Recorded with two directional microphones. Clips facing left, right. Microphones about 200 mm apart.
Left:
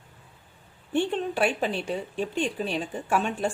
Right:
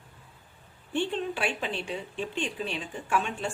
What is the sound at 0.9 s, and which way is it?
A woman's voice, 45° left (ahead or behind).